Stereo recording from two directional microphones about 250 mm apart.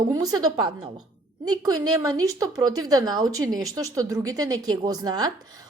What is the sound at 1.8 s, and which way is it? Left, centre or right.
A woman's voice, centre.